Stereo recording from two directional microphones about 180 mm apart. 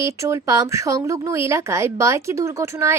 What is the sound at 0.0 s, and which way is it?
A woman's voice, 15° right (ahead or behind).